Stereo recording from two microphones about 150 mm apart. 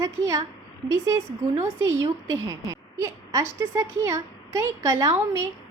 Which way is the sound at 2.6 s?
20° right (ahead or behind).